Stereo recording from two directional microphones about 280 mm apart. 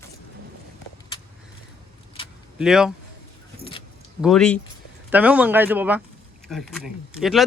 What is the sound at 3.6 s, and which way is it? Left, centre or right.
Keys jangling, centre.